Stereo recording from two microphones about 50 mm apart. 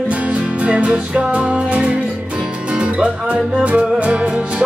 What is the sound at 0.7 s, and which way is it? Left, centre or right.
Music, right.